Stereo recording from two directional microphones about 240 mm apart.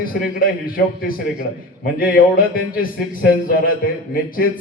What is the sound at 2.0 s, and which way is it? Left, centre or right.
Speech, left.